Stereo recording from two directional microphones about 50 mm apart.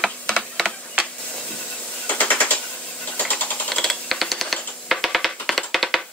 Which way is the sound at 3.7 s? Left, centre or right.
Centre.